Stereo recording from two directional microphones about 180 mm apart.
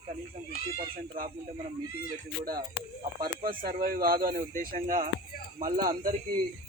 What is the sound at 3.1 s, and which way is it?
Speech, 55° right (ahead or behind).